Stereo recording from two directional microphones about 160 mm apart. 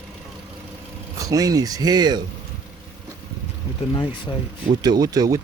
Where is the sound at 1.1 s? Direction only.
20° right (ahead or behind).